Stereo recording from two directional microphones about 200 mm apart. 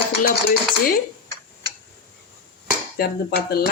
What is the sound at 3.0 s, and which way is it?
Speech, 50° left (ahead or behind).